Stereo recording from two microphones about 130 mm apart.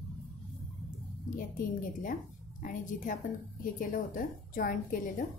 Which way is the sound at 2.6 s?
80° left.